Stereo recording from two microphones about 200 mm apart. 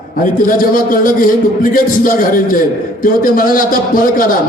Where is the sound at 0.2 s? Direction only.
45° left (ahead or behind).